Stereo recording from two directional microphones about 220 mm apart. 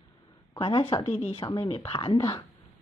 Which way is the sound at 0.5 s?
25° left (ahead or behind).